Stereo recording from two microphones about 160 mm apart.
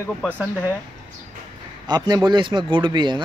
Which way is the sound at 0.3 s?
10° right (ahead or behind).